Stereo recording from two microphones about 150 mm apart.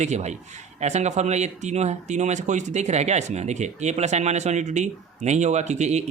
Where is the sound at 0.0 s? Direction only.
50° right (ahead or behind).